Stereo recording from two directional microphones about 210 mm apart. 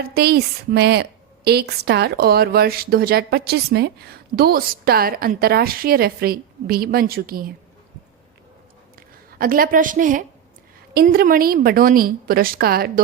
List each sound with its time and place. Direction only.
0.0 s a woman's voice: 50° right (ahead or behind)
9.0 s a woman's voice: 45° right (ahead or behind)